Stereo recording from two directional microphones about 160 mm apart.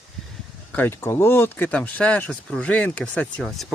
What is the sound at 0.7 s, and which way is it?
Speech, 15° left (ahead or behind).